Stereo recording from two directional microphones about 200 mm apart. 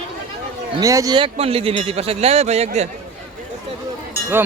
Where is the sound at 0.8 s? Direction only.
15° right (ahead or behind); by 2.9 s 35° right (ahead or behind).